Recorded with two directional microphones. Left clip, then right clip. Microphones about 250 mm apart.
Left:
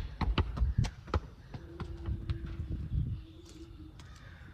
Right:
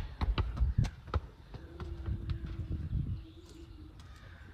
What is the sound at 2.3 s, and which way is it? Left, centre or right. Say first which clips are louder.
Vehicle: left 2 dB; left.